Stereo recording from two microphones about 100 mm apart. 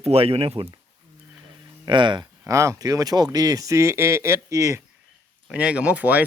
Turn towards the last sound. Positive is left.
turn(degrees=-15)  # may be behind; listen again after turning